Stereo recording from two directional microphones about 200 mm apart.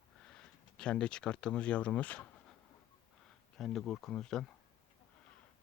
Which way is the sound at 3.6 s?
Centre (ahead or behind).